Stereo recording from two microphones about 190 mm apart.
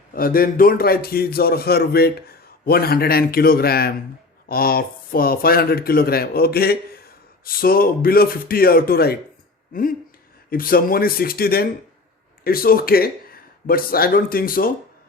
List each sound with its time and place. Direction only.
0.1 s speech: 50° left (ahead or behind)
10.5 s speech: 50° left (ahead or behind)